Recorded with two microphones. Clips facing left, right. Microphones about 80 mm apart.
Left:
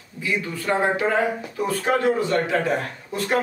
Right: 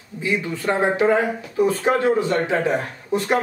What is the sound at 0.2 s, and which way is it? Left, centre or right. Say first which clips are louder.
Speech: right 3 dB; right.